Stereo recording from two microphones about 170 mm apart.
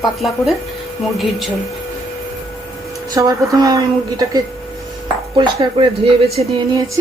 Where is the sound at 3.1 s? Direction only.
20° right (ahead or behind).